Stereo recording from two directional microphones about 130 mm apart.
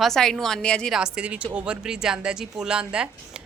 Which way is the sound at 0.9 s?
5° right (ahead or behind).